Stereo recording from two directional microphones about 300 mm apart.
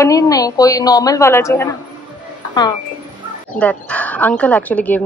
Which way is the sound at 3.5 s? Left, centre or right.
Centre.